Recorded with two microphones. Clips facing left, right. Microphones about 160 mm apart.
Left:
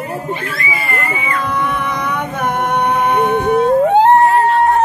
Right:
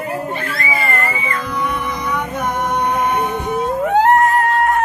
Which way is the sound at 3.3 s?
60° left (ahead or behind).